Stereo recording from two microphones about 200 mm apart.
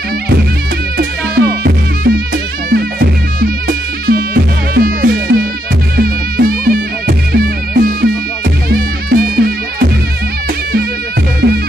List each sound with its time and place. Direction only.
0.9 s music: 50° right (ahead or behind)
11.4 s music: 55° right (ahead or behind)